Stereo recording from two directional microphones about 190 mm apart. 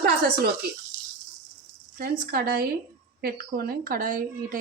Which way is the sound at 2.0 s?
50° right (ahead or behind).